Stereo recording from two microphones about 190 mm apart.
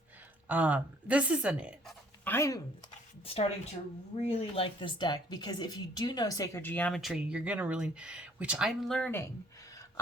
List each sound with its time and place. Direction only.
0.4 s speech: 10° right (ahead or behind)
2.2 s speech: 15° left (ahead or behind)
3.3 s speech: 30° left (ahead or behind); by 9.2 s 5° left (ahead or behind)